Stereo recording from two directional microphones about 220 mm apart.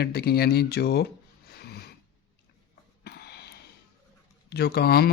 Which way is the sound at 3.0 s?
45° left (ahead or behind).